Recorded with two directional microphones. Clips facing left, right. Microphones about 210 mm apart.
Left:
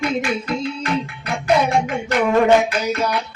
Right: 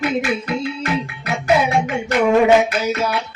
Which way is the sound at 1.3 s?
5° right (ahead or behind).